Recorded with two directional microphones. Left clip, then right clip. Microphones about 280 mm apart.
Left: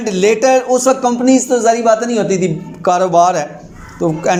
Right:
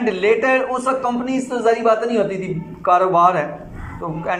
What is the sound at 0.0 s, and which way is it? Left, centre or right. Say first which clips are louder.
A man's voice: left 4 dB; left.